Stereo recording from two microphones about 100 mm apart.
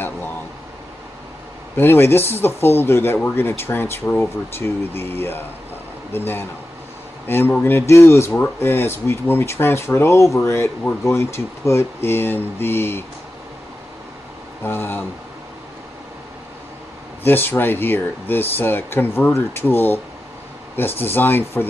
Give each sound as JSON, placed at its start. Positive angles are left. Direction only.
{"t": 1.8, "sound": "speech", "side_deg": 25}
{"t": 14.6, "sound": "speech", "side_deg": 25}
{"t": 17.2, "sound": "speech", "side_deg": 20}